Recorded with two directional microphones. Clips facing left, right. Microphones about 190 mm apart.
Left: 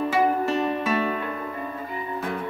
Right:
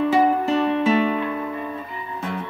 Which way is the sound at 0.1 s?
25° right (ahead or behind).